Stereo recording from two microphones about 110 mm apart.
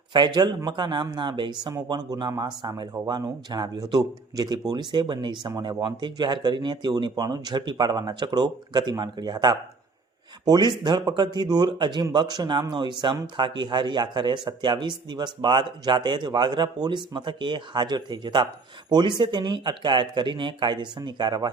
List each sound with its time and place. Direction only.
0.1 s speech: 45° right (ahead or behind)